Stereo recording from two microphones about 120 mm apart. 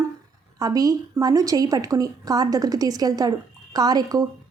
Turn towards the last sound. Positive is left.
turn(degrees=-35)  # may be behind; listen again after turning